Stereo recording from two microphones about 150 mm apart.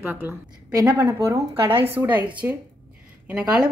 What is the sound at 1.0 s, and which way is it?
A woman's voice, 20° right (ahead or behind).